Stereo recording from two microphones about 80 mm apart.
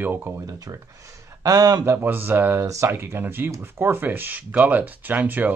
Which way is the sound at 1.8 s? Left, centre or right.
Right.